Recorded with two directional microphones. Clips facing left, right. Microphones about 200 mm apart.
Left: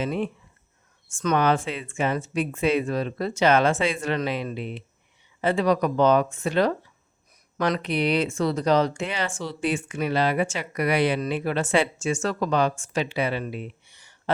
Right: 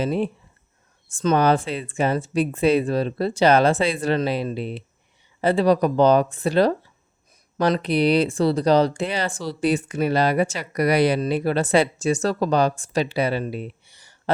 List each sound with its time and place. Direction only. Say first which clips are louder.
0.0 s speech: right 4 dB; 35° right (ahead or behind)